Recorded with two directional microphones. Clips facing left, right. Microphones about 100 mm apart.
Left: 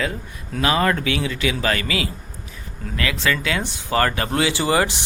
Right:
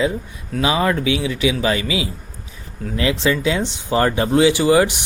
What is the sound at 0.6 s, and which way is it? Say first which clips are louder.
Speech: right 1 dB; 10° right (ahead or behind).